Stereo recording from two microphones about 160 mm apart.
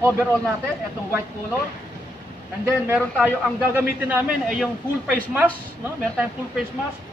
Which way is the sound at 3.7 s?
10° right (ahead or behind).